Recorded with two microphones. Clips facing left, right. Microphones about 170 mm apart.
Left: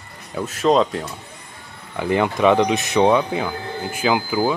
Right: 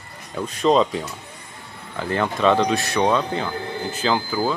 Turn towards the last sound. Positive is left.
turn(degrees=10)  # may be behind; listen again after turning